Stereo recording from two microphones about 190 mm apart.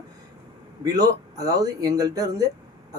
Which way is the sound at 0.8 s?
20° right (ahead or behind).